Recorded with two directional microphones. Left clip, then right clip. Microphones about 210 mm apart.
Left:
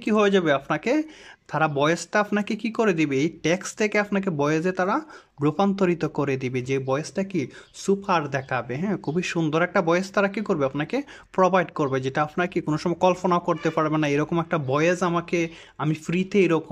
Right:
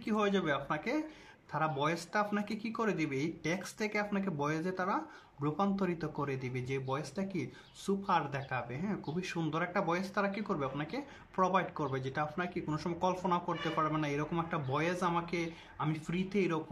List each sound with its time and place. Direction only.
0.0 s speech: 35° left (ahead or behind)